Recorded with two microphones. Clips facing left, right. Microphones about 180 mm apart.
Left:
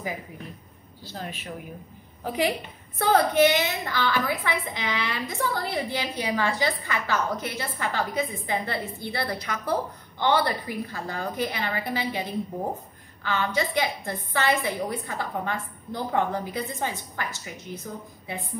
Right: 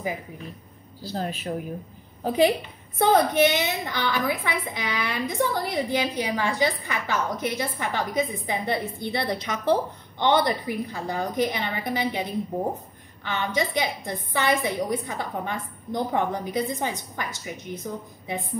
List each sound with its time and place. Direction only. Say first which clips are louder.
1.0 s a woman's voice: right 7 dB; 35° right (ahead or behind); by 18.4 s 15° right (ahead or behind)